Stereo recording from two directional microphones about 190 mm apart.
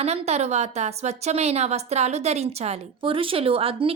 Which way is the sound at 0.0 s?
35° right (ahead or behind).